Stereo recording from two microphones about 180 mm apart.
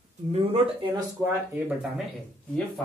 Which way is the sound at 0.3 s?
30° right (ahead or behind).